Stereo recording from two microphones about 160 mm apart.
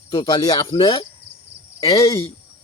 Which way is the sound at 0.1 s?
25° left (ahead or behind).